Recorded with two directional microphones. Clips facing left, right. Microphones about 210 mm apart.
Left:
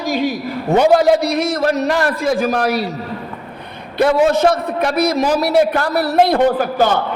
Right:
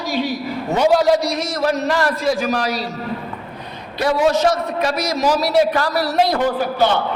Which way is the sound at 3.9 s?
55° left (ahead or behind).